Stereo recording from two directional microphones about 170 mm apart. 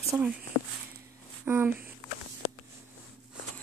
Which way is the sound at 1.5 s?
10° right (ahead or behind).